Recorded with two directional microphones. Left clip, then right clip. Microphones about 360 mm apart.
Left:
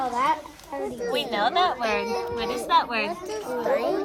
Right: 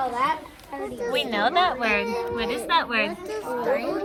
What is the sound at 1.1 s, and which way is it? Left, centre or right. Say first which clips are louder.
A woman's voice: right 2 dB; centre.